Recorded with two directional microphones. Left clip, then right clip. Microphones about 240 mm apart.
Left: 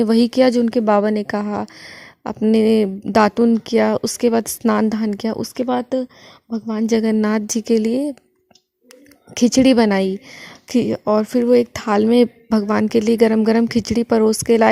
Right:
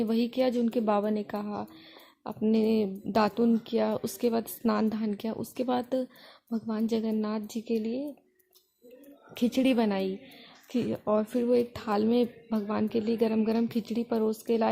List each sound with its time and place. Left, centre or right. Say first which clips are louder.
0.0 s a woman's voice: left 13 dB; left
6.9 s a woman's voice: left 15 dB; left
7.5 s speech: left 14 dB; left
9.3 s a woman's voice: left 13 dB; left